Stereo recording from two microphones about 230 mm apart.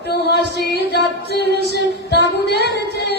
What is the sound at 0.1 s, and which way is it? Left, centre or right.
Music, left.